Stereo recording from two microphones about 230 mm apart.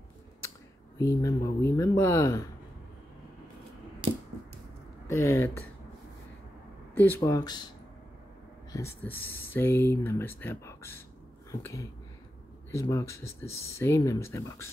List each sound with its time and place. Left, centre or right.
0.9 s speech: centre
5.0 s speech: centre
7.0 s speech: centre
8.7 s speech: centre